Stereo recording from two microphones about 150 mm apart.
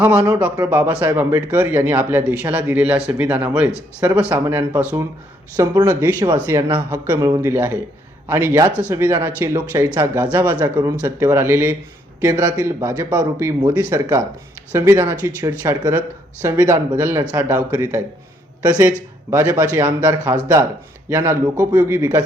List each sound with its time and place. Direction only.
0.0 s speech: 15° right (ahead or behind)
19.3 s speech: 15° right (ahead or behind)